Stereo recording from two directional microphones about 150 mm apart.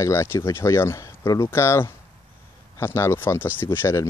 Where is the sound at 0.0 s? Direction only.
20° left (ahead or behind).